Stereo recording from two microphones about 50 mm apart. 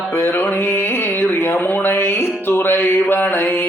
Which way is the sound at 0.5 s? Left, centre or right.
Left.